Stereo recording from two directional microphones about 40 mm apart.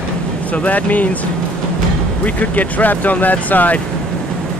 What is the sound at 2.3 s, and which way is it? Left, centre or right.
Speech, left.